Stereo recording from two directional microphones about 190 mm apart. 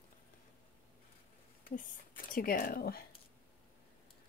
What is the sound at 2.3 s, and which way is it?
Speech, 45° left (ahead or behind).